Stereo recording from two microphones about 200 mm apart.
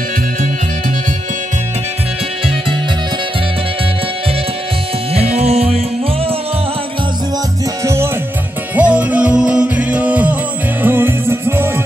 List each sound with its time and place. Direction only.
5.1 s music: 30° right (ahead or behind)
7.8 s music: 15° right (ahead or behind)